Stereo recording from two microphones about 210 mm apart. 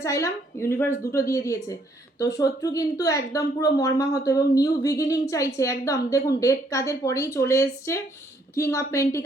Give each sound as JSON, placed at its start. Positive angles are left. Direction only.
{"t": 0.0, "sound": "a woman's voice", "side_deg": 15}